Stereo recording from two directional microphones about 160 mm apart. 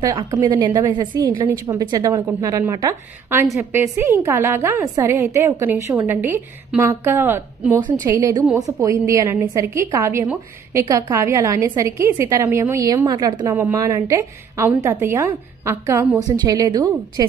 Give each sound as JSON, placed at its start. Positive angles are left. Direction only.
{"t": 0.0, "sound": "a woman's voice", "side_deg": -25}